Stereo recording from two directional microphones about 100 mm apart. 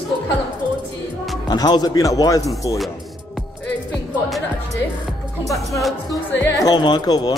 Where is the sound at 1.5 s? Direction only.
45° left (ahead or behind).